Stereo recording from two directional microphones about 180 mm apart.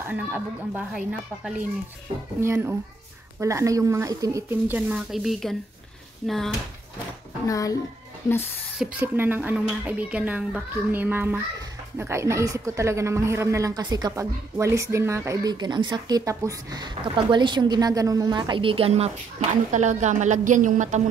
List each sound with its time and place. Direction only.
0.0 s speech: 10° right (ahead or behind)
7.4 s a child's voice: 20° left (ahead or behind)
8.7 s a woman's voice: 10° right (ahead or behind); by 21.0 s 45° right (ahead or behind)